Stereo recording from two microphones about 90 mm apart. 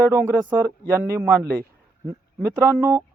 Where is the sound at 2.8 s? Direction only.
35° right (ahead or behind).